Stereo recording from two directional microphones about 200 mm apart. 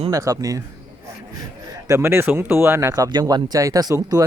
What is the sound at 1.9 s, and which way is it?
Speech, 10° right (ahead or behind).